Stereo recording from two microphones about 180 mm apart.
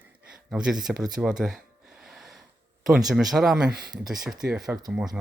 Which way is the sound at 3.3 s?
Centre (ahead or behind).